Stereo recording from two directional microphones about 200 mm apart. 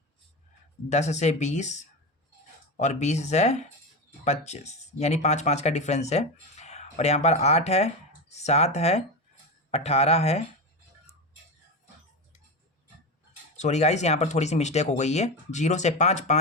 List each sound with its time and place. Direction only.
0.9 s speech: 35° left (ahead or behind)
2.7 s speech: 35° left (ahead or behind)
13.6 s speech: 35° left (ahead or behind)